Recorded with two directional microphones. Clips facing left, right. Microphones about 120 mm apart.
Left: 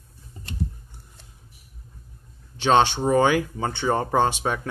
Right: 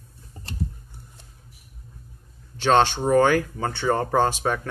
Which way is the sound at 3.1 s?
15° left (ahead or behind).